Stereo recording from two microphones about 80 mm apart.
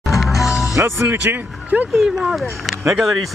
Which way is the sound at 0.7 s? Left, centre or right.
Right.